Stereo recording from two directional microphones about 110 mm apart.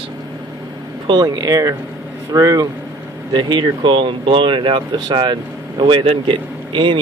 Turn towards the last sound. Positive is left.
turn(degrees=-45)  # may be behind; listen again after turning